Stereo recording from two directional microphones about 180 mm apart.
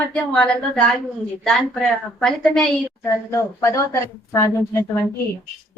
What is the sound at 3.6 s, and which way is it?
A woman's voice, 15° left (ahead or behind).